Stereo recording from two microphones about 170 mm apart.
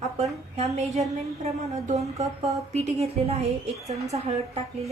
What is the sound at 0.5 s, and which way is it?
Speech, 40° right (ahead or behind).